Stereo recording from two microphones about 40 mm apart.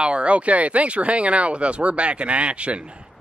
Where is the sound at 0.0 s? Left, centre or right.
Right.